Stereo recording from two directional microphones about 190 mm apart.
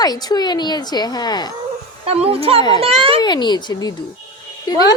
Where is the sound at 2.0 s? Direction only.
30° right (ahead or behind).